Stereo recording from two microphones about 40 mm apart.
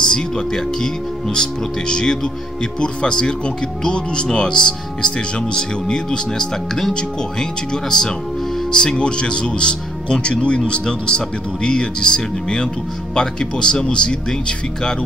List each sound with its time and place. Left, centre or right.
0.0 s speech: centre